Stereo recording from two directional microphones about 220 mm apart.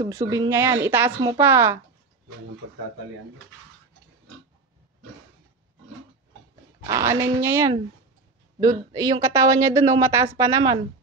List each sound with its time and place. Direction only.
0.0 s speech: 15° right (ahead or behind)
1.1 s a woman's voice: 20° right (ahead or behind)
1.4 s speech: 10° right (ahead or behind)
6.9 s speech: 15° right (ahead or behind)